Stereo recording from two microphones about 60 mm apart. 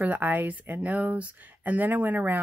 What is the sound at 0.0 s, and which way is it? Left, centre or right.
Speech, right.